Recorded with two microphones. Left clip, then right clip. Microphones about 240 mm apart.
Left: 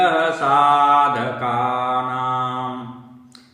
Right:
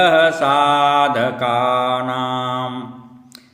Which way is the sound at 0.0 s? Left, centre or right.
Right.